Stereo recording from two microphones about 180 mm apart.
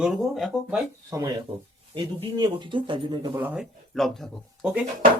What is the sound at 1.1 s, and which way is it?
Speech, 15° right (ahead or behind).